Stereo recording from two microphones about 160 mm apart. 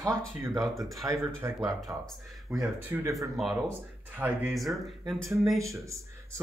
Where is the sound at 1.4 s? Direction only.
15° right (ahead or behind).